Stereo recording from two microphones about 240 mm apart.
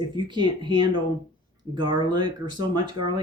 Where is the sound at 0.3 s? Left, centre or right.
Centre.